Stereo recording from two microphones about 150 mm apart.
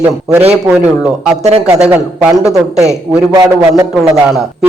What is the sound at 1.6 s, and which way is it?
Speech, 5° right (ahead or behind).